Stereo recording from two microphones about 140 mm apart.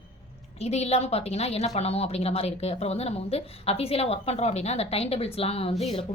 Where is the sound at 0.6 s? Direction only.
50° left (ahead or behind).